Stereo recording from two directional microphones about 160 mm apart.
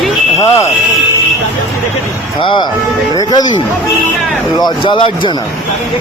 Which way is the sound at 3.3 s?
25° left (ahead or behind).